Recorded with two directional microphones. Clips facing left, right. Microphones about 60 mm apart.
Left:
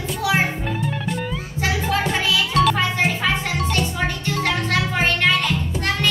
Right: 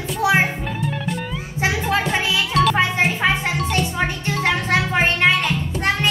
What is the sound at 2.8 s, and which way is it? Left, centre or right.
Music, right.